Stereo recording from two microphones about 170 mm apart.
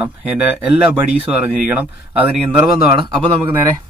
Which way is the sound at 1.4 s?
10° right (ahead or behind).